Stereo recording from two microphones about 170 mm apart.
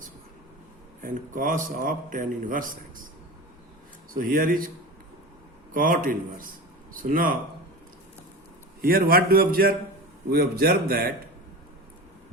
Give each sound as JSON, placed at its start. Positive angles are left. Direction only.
{"t": 1.0, "sound": "a man's voice", "side_deg": -50}
{"t": 4.1, "sound": "a man's voice", "side_deg": -55}
{"t": 5.7, "sound": "a man's voice", "side_deg": -55}
{"t": 8.8, "sound": "a man's voice", "side_deg": -60}